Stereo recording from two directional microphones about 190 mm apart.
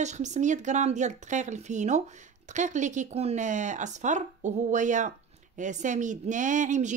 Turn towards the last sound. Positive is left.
turn(degrees=-40)  # may be behind; listen again after turning